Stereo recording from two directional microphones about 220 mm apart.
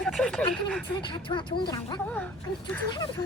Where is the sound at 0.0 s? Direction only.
Centre (ahead or behind).